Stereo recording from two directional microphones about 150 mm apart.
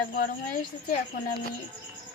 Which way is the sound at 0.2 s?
65° left (ahead or behind).